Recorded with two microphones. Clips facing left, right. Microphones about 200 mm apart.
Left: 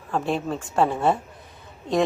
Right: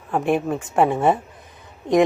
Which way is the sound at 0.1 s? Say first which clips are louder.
Right 5 dB; 15° right (ahead or behind).